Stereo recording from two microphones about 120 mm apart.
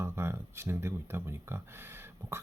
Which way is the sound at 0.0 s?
20° right (ahead or behind).